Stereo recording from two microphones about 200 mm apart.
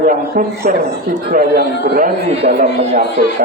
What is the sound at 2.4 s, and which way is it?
Speech, 30° right (ahead or behind).